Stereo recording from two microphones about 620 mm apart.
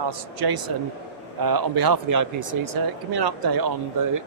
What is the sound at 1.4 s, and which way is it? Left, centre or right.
Speech, right.